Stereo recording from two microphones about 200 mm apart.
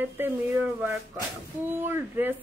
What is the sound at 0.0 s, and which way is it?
Speech, 10° right (ahead or behind).